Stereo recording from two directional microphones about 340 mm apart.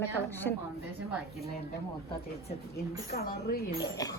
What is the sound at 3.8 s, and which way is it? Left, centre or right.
Speech, centre.